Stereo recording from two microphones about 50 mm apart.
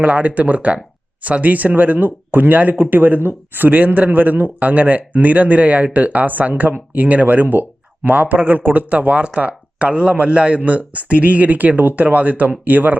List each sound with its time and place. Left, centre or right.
0.0 s speech: right